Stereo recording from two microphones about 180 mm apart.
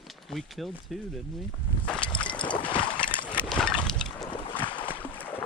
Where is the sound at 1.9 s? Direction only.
5° left (ahead or behind).